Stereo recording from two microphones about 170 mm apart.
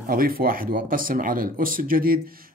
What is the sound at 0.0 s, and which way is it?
Speech, 55° right (ahead or behind).